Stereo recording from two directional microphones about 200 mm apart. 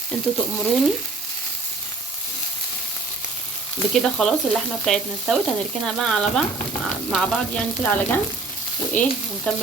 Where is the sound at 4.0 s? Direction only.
Centre (ahead or behind).